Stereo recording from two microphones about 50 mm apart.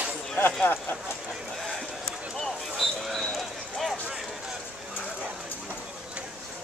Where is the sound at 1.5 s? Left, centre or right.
Centre.